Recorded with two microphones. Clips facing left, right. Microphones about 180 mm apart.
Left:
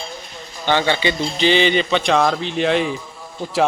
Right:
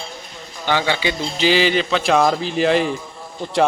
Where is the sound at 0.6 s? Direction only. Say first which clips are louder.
Left 2 dB; 10° right (ahead or behind).